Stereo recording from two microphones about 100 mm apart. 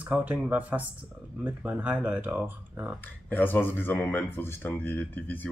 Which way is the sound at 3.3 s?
20° left (ahead or behind).